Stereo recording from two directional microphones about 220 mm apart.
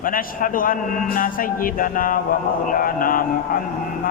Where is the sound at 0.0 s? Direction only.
40° left (ahead or behind).